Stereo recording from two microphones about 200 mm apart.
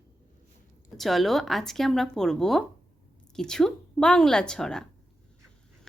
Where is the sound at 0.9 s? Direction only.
Centre (ahead or behind).